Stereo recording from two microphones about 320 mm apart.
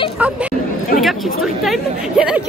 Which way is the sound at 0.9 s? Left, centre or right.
Left.